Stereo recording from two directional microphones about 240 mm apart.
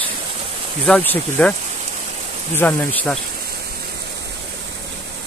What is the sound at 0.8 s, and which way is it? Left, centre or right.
Speech, centre.